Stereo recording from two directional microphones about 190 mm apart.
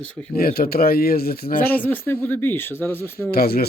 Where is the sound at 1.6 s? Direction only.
10° left (ahead or behind).